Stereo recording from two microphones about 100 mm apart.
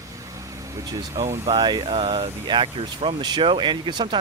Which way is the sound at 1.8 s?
65° right (ahead or behind).